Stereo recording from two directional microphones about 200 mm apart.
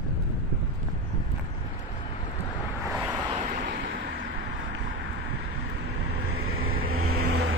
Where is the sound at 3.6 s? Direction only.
45° right (ahead or behind).